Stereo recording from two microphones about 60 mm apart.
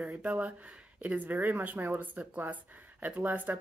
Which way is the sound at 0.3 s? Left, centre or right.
Right.